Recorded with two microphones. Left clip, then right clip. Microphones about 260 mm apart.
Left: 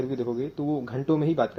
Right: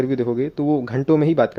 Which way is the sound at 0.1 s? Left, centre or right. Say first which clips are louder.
Right 8 dB; right.